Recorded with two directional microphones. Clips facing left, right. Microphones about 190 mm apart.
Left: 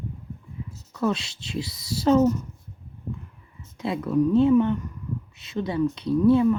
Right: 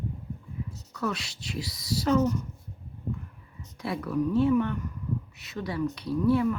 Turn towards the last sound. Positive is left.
turn(degrees=20)  # may be behind; listen again after turning